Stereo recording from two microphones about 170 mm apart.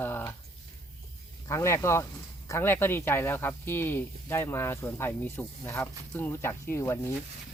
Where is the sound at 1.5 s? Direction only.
15° left (ahead or behind).